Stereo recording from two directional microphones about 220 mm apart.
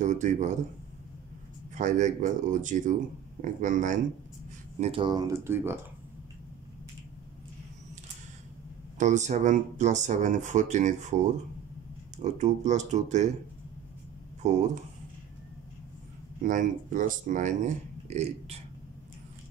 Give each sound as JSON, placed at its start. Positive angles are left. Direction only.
{"t": 0.0, "sound": "speech", "side_deg": -35}
{"t": 1.8, "sound": "speech", "side_deg": -35}
{"t": 8.9, "sound": "speech", "side_deg": -35}
{"t": 12.2, "sound": "speech", "side_deg": -30}
{"t": 16.4, "sound": "speech", "side_deg": -35}